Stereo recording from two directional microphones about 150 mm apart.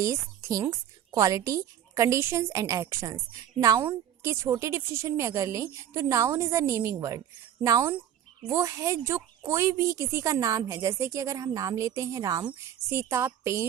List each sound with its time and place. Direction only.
0.0 s a woman's voice: 20° right (ahead or behind)